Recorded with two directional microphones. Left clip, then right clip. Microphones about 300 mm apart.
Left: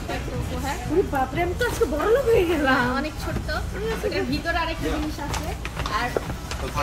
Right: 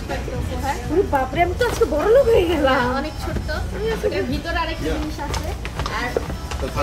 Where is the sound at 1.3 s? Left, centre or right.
Centre.